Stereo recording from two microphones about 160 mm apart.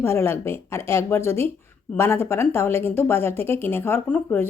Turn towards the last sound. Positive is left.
turn(degrees=10)  # may be behind; listen again after turning